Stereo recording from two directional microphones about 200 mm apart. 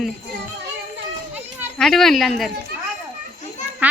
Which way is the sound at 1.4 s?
10° right (ahead or behind).